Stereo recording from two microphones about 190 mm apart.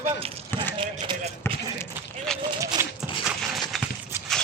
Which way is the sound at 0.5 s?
10° left (ahead or behind).